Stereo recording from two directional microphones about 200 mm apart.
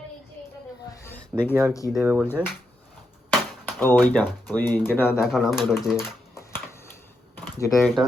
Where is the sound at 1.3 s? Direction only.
10° right (ahead or behind).